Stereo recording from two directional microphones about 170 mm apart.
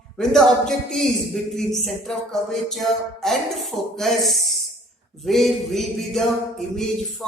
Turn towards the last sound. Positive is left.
turn(degrees=0)  # may be behind; listen again after turning